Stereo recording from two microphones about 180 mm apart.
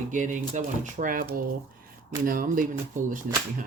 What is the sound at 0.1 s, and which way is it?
Speech, 45° right (ahead or behind).